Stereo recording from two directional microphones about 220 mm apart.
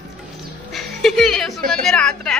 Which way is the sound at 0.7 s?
Centre (ahead or behind).